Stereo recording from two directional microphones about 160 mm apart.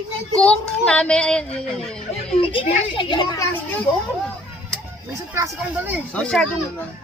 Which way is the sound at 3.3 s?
10° left (ahead or behind).